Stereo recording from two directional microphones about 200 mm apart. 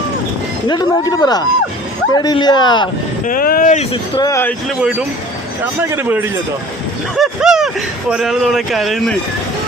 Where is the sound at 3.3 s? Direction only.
45° left (ahead or behind).